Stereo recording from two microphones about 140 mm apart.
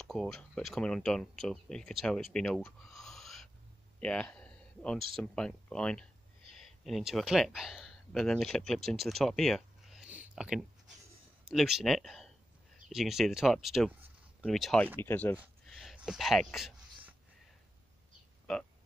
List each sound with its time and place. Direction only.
0.0 s speech: centre (ahead or behind)
15.0 s speech: 15° left (ahead or behind)
15.6 s a sound: centre (ahead or behind)
18.5 s speech: 5° left (ahead or behind)